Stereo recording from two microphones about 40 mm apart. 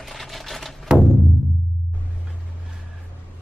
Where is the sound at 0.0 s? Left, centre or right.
Centre.